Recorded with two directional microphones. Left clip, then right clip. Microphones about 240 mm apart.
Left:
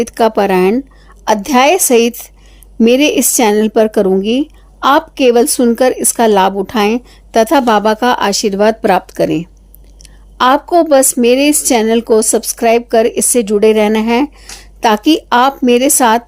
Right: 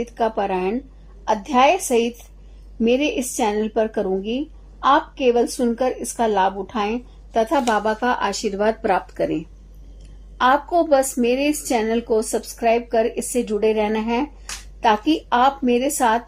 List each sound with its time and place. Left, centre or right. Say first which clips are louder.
0.0 s a woman's voice: left 10 dB; left